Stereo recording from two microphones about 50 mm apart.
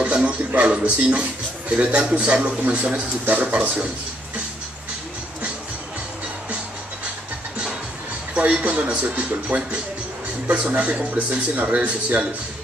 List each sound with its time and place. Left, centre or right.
0.0 s a sound: right
0.7 s a man's voice: right
8.5 s a man's voice: right